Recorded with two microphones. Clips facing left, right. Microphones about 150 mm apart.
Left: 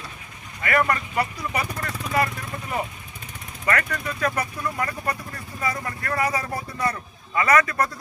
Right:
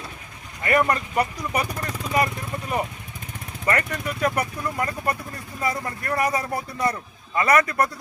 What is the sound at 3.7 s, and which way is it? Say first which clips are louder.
Speech: right 1 dB; 20° right (ahead or behind).